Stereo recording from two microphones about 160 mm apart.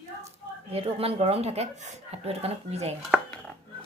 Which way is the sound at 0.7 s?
40° right (ahead or behind).